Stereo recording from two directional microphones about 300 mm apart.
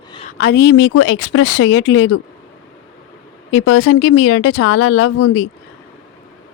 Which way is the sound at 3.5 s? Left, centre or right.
Left.